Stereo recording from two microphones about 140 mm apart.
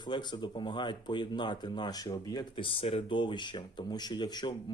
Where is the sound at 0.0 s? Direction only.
30° left (ahead or behind).